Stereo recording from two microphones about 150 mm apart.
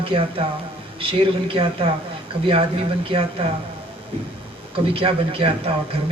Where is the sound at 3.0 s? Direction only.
35° right (ahead or behind).